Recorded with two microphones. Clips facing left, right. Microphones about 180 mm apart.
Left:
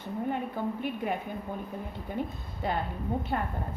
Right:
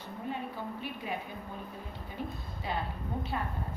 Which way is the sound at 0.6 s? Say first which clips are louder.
Left 7 dB; 55° left (ahead or behind).